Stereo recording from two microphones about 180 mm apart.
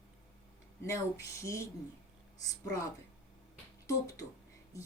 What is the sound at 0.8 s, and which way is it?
Speech, 15° left (ahead or behind).